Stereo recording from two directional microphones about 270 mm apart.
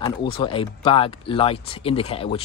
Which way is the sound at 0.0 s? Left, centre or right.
Centre.